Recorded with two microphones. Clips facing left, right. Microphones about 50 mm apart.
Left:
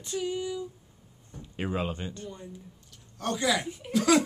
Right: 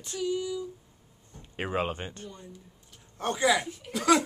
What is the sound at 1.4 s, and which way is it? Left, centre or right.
Speech, right.